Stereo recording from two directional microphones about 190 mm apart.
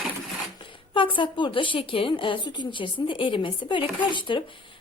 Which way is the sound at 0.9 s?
25° left (ahead or behind).